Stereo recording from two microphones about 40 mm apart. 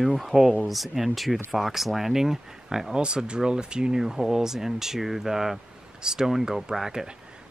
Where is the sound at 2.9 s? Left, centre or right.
Right.